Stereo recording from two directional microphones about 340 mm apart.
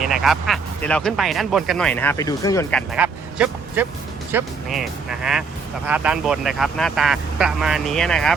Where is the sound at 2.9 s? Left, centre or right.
Centre.